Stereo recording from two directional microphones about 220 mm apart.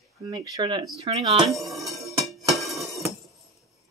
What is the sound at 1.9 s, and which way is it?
Music, 15° right (ahead or behind).